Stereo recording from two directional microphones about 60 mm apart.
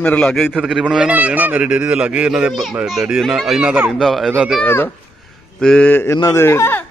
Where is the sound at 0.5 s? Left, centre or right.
Centre.